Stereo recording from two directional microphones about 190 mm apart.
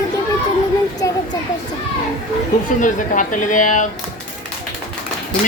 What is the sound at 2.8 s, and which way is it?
Speech, 45° left (ahead or behind).